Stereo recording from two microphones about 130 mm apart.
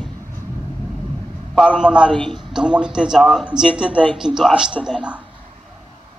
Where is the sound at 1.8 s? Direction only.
10° right (ahead or behind).